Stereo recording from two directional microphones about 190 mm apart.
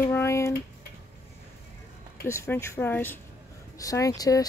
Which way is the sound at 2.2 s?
15° left (ahead or behind).